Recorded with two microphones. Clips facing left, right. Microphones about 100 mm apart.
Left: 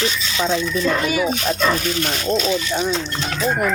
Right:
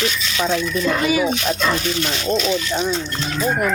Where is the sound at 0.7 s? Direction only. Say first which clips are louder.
Right 1 dB; 5° right (ahead or behind).